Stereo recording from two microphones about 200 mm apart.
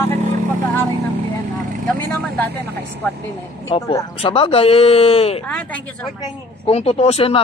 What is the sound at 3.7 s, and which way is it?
Speech, 15° left (ahead or behind).